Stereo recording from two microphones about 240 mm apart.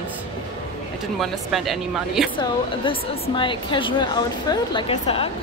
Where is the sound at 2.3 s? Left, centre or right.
Left.